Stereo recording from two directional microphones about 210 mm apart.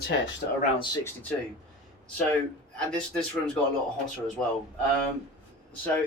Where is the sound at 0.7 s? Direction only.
20° left (ahead or behind).